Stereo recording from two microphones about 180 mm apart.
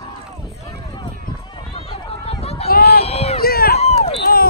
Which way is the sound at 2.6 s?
60° left (ahead or behind).